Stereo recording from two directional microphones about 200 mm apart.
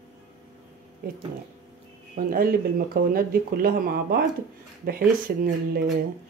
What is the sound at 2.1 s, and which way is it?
Speech, 45° right (ahead or behind).